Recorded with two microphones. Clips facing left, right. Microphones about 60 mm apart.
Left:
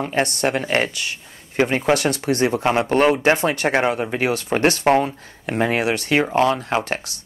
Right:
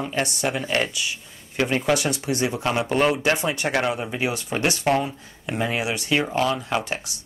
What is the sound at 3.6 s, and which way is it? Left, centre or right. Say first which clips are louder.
Speech: left 4 dB; left.